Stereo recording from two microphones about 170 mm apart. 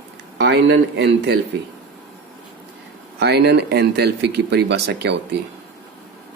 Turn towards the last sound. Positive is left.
turn(degrees=-80)